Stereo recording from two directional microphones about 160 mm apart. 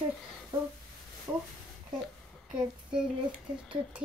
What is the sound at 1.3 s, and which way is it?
Speech, 20° right (ahead or behind).